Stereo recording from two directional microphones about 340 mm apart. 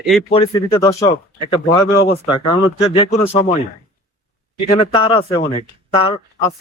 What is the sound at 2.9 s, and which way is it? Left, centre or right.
Speech, centre.